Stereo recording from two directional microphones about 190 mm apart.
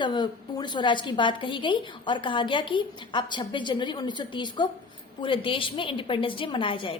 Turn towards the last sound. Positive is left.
turn(degrees=25)  # may be behind; listen again after turning